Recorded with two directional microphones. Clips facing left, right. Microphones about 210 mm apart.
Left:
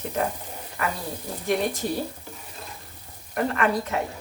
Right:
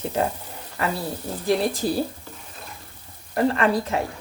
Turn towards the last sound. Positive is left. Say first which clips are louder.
# right 2 dB
turn(degrees=-30)  # may be behind; listen again after turning